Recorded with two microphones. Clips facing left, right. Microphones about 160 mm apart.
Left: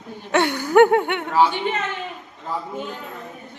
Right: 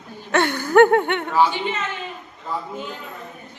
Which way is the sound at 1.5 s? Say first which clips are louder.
Left 1 dB; 55° left (ahead or behind).